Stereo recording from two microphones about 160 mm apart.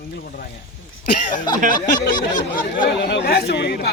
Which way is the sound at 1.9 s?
60° left (ahead or behind).